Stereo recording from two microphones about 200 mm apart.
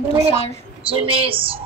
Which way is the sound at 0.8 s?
25° right (ahead or behind).